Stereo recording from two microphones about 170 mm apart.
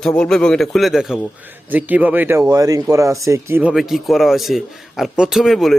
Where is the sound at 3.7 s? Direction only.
Centre (ahead or behind).